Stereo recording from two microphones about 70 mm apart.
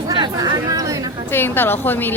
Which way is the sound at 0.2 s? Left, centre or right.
Right.